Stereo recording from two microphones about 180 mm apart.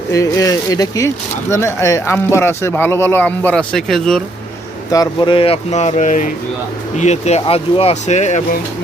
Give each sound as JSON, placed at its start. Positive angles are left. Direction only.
{"t": 0.1, "sound": "speech", "side_deg": 20}
{"t": 4.9, "sound": "speech", "side_deg": 25}